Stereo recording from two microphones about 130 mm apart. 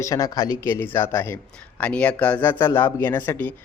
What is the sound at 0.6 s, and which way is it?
A man's voice, 15° left (ahead or behind).